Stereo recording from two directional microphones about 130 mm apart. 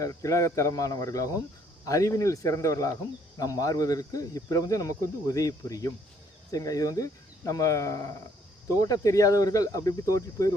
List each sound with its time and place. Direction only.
0.0 s speech: 25° left (ahead or behind)